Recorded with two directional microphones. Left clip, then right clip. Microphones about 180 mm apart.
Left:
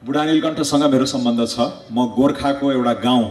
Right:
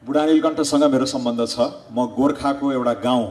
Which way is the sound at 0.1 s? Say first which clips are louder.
Right 1 dB; 30° right (ahead or behind).